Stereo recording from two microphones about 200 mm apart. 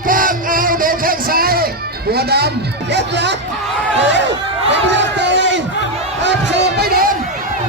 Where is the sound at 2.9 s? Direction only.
60° right (ahead or behind).